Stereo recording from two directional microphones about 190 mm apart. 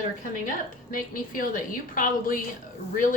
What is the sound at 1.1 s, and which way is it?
A woman's voice, 50° left (ahead or behind).